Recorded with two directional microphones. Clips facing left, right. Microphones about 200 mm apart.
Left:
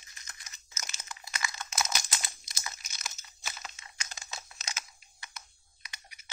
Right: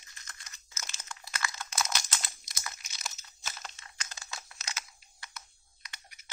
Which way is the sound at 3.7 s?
15° left (ahead or behind).